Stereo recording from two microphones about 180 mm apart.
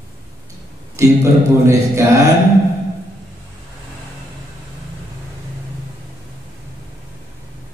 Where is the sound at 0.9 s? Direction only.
15° right (ahead or behind).